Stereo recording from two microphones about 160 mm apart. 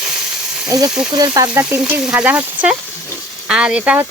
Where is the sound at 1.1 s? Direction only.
25° right (ahead or behind).